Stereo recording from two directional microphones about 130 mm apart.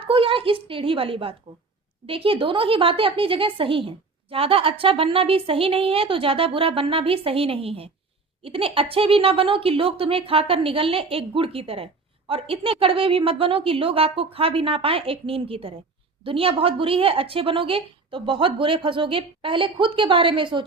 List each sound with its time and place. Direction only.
0.0 s a woman's voice: 45° right (ahead or behind)